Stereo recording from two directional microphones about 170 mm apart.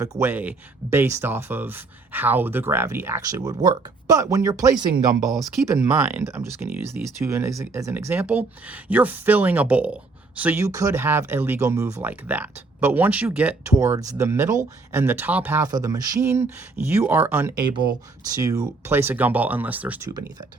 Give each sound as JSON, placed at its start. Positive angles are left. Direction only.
{"t": 0.0, "sound": "speech", "side_deg": -15}
{"t": 20.1, "sound": "speech", "side_deg": -20}